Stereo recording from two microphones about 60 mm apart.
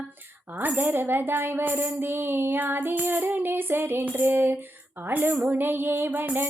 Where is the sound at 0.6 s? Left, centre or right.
Right.